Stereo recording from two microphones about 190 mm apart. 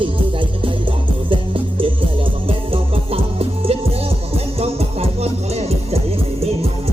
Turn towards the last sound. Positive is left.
turn(degrees=-35)  # may be behind; listen again after turning